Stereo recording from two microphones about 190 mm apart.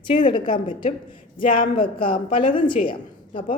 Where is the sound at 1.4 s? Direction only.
50° left (ahead or behind).